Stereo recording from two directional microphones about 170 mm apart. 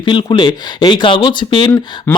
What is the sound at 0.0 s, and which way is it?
Speech, 30° left (ahead or behind).